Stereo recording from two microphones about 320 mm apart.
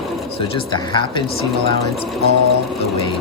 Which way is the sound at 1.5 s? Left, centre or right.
Centre.